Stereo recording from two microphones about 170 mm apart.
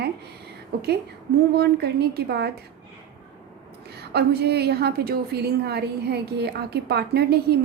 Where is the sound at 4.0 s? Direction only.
70° right (ahead or behind).